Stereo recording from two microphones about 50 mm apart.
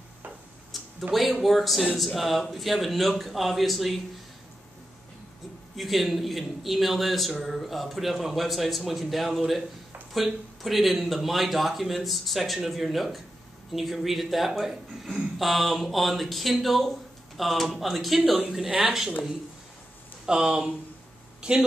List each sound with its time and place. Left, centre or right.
0.7 s a sound: centre
1.1 s a man's voice: centre
5.8 s a man's voice: centre
20.2 s speech: centre